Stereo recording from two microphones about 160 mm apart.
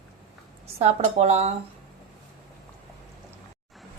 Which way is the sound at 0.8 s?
45° right (ahead or behind).